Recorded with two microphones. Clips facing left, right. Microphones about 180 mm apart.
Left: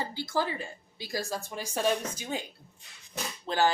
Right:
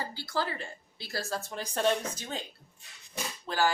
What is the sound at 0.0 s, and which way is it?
A woman's voice, 20° left (ahead or behind).